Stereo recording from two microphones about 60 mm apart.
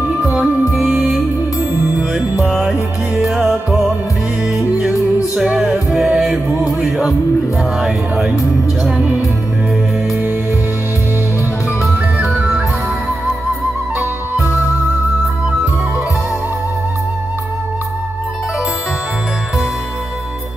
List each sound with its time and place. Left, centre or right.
0.7 s music: centre
2.4 s music: centre
5.3 s music: centre
12.3 s music: centre
14.4 s music: left